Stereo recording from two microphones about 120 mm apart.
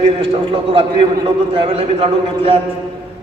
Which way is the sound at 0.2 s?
50° right (ahead or behind).